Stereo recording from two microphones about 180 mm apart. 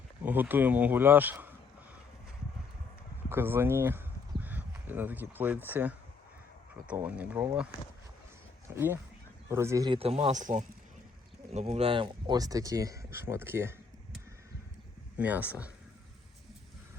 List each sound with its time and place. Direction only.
0.2 s a man's voice: 10° right (ahead or behind)
3.2 s a man's voice: 15° right (ahead or behind)
8.7 s a man's voice: 10° right (ahead or behind)
15.2 s a man's voice: 10° right (ahead or behind)